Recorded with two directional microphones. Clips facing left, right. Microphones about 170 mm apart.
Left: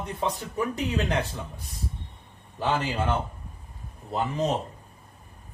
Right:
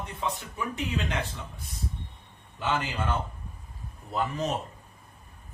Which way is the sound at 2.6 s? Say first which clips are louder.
Left 3 dB; 35° left (ahead or behind).